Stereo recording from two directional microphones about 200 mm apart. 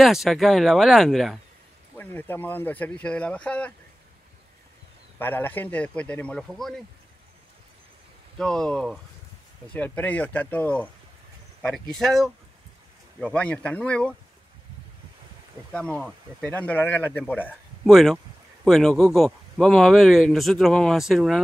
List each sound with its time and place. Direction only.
0.0 s speech: centre (ahead or behind)
5.2 s speech: 10° left (ahead or behind)
8.4 s speech: 5° left (ahead or behind)
13.3 s speech: 5° left (ahead or behind)
15.7 s speech: 5° left (ahead or behind)